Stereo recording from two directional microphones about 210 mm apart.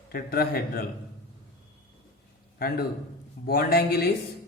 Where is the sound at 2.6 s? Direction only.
45° left (ahead or behind).